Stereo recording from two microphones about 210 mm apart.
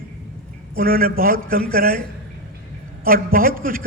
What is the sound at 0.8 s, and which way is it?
A man's voice, 45° right (ahead or behind).